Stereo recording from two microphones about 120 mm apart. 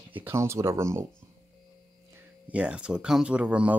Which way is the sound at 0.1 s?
15° right (ahead or behind).